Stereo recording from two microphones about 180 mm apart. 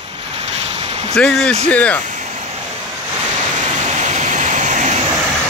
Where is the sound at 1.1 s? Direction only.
5° left (ahead or behind).